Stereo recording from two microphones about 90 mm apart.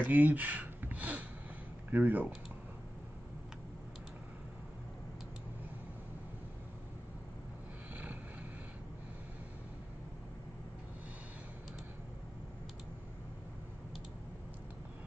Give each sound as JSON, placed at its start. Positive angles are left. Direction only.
{"t": 0.0, "sound": "speech", "side_deg": -20}
{"t": 7.9, "sound": "vehicle", "side_deg": -20}